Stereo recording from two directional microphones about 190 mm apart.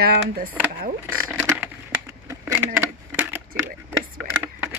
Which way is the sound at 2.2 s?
10° right (ahead or behind).